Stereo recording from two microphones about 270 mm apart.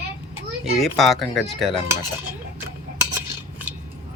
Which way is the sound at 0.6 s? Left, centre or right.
Centre.